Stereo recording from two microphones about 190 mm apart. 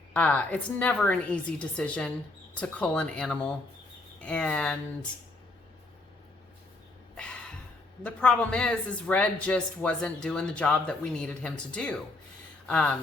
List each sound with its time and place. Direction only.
0.1 s a woman's voice: 5° left (ahead or behind)
8.0 s speech: 5° left (ahead or behind)